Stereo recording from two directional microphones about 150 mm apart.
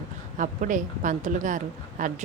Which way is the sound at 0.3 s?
60° right (ahead or behind).